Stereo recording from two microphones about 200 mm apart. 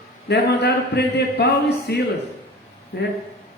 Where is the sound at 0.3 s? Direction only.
55° left (ahead or behind).